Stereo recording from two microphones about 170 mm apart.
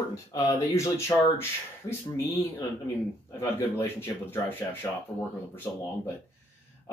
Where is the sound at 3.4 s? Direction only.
15° left (ahead or behind).